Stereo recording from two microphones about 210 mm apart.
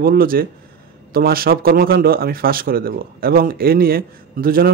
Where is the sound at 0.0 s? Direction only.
45° right (ahead or behind).